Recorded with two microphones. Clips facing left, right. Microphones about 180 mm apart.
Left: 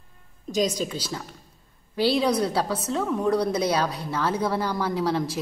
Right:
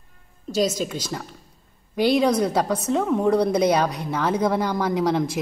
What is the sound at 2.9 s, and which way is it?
A woman's voice, 15° right (ahead or behind).